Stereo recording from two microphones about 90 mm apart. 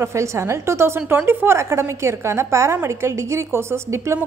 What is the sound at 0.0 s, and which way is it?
A woman's voice, 35° right (ahead or behind).